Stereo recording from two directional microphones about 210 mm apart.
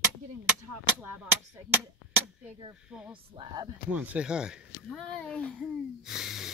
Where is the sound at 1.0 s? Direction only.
10° right (ahead or behind).